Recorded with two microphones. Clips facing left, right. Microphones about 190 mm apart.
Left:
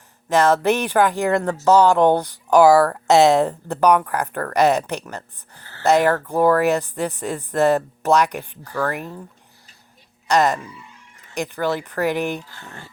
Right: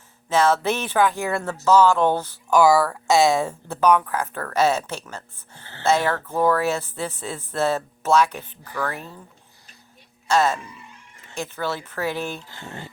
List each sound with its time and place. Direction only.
0.3 s speech: 15° left (ahead or behind)
10.2 s speech: 15° left (ahead or behind)
12.5 s speech: 20° right (ahead or behind)